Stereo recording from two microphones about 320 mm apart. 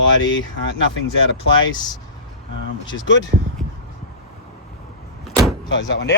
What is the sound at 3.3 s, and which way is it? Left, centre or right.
Speech, right.